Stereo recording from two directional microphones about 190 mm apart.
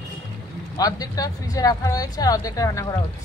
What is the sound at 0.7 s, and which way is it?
Speech, 20° left (ahead or behind).